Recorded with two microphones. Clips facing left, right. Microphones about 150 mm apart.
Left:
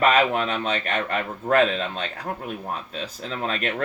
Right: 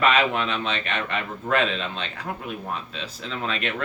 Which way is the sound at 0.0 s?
40° left (ahead or behind).